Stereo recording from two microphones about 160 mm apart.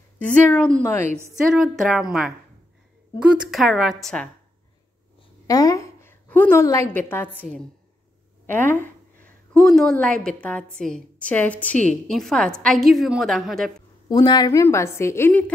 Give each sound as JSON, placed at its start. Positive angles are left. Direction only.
{"t": 0.2, "sound": "a woman's voice", "side_deg": 10}
{"t": 1.5, "sound": "a woman's voice", "side_deg": 0}
{"t": 5.5, "sound": "a woman's voice", "side_deg": 20}
{"t": 8.5, "sound": "a sound", "side_deg": 10}
{"t": 9.7, "sound": "a woman's voice", "side_deg": 0}
{"t": 14.0, "sound": "a woman's voice", "side_deg": 25}